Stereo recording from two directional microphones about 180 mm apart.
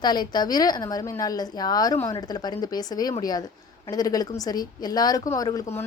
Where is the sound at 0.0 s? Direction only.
25° left (ahead or behind).